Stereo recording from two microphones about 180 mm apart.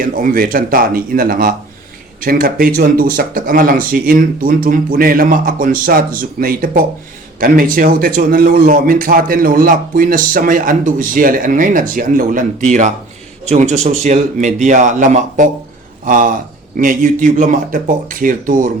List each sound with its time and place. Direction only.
0.0 s speech: 50° right (ahead or behind)